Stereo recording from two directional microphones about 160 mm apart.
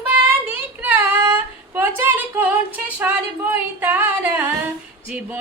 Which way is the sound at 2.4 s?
10° right (ahead or behind).